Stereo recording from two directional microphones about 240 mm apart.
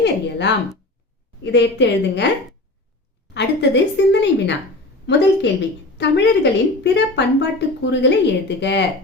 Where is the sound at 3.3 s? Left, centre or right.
Left.